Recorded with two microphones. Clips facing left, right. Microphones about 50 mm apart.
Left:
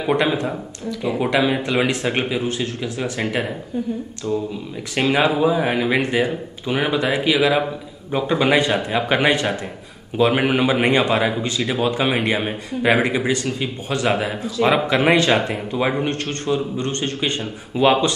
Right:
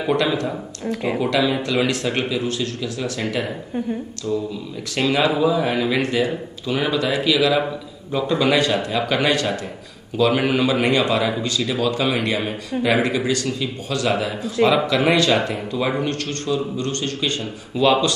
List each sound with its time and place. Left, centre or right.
0.1 s speech: left
4.3 s speech: centre
4.9 s speech: left